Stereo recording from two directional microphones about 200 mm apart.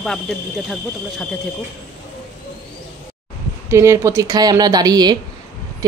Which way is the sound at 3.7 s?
15° right (ahead or behind).